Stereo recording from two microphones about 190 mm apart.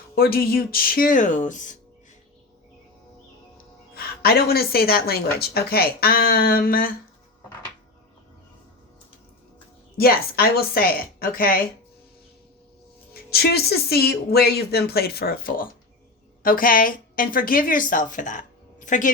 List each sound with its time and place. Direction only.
0.2 s a woman's voice: 55° left (ahead or behind)
3.9 s a woman's voice: 55° left (ahead or behind)
10.0 s a woman's voice: 55° left (ahead or behind)
13.3 s a woman's voice: 55° left (ahead or behind)